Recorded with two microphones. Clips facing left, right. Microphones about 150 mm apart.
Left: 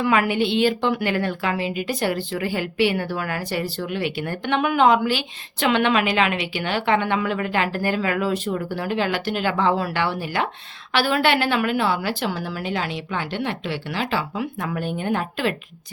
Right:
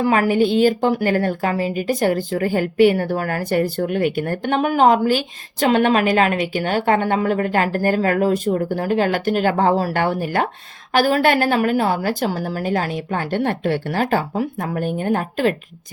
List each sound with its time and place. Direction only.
0.0 s a woman's voice: 40° right (ahead or behind)